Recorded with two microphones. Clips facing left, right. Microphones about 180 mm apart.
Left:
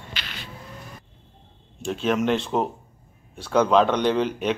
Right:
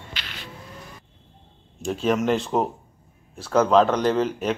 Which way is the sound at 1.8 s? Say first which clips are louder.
Right 1 dB; 5° right (ahead or behind).